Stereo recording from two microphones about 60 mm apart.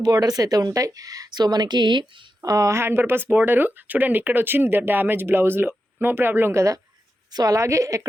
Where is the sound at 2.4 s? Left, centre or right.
Right.